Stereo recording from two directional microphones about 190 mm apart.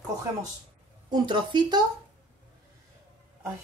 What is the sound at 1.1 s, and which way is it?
Speech, 25° right (ahead or behind).